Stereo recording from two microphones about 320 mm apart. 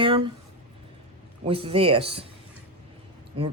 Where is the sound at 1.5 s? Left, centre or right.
Centre.